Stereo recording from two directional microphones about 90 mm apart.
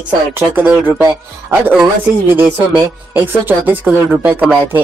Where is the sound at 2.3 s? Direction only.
20° right (ahead or behind).